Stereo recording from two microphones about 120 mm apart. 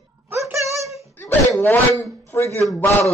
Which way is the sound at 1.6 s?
20° left (ahead or behind).